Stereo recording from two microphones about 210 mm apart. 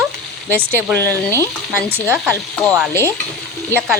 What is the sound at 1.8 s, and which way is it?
Speech, 10° right (ahead or behind).